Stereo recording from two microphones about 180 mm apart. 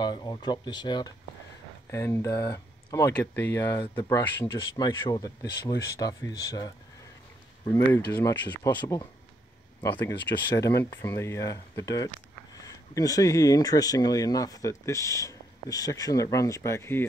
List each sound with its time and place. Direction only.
0.0 s speech: 25° left (ahead or behind)
3.8 s speech: 25° left (ahead or behind)